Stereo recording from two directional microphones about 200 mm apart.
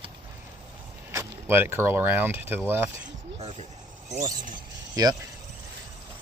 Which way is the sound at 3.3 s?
30° right (ahead or behind).